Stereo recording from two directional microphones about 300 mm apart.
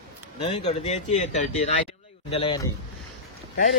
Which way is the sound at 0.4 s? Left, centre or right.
Centre.